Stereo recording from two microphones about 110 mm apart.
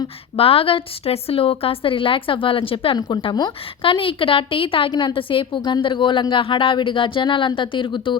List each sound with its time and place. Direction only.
0.3 s a woman's voice: 60° left (ahead or behind)